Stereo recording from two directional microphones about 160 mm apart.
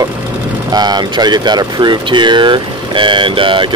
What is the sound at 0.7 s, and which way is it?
Speech, 25° right (ahead or behind).